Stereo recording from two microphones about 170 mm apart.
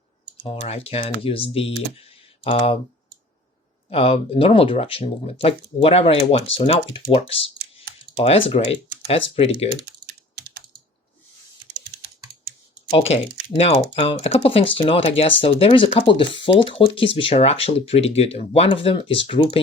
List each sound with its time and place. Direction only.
0.4 s speech: 35° left (ahead or behind)
3.8 s speech: 35° left (ahead or behind)
10.3 s typing: 80° right
12.9 s speech: 35° left (ahead or behind)